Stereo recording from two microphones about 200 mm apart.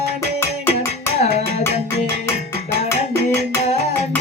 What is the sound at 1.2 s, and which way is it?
Music, 30° left (ahead or behind).